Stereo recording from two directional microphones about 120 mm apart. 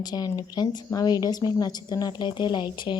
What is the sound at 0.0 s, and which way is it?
A woman's voice, 35° left (ahead or behind).